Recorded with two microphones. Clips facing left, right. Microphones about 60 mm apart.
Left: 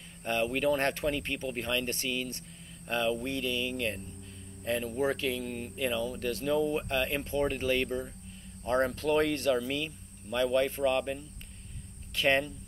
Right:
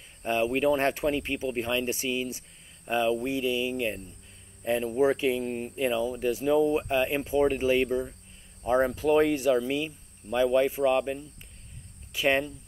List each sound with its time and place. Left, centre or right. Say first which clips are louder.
0.2 s speech: right 4 dB; centre
5.9 s speech: right 5 dB; centre